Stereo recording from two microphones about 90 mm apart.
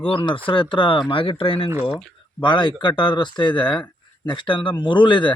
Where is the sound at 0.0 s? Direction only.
70° left (ahead or behind).